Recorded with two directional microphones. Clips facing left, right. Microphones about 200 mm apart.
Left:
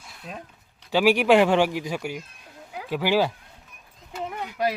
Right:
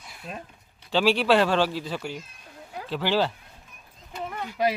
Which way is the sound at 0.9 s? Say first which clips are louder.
Left 3 dB; 10° left (ahead or behind).